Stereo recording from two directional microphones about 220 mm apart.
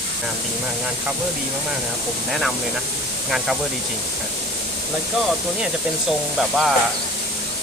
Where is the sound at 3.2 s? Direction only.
Centre (ahead or behind).